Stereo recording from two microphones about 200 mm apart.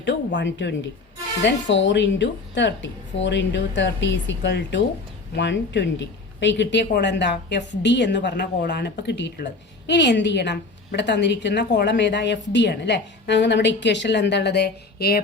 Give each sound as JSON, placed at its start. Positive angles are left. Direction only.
{"t": 0.3, "sound": "speech", "side_deg": 60}